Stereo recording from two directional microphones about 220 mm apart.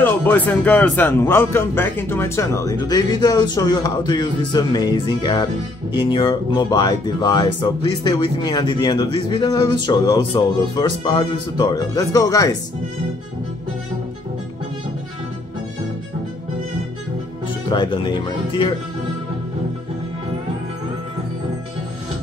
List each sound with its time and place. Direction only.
0.0 s a man's voice: 10° left (ahead or behind)
17.6 s speech: 20° left (ahead or behind)